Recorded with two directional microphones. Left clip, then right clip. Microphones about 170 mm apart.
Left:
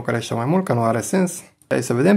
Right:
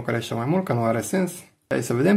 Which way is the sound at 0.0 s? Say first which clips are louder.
Left 3 dB; 30° left (ahead or behind).